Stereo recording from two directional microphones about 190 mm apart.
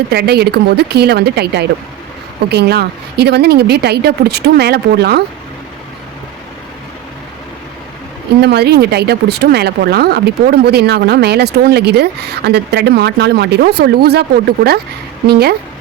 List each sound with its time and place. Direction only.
0.1 s speech: 55° right (ahead or behind)
8.4 s speech: 60° right (ahead or behind)